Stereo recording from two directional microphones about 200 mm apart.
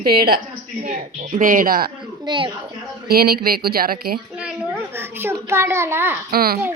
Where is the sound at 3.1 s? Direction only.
50° right (ahead or behind).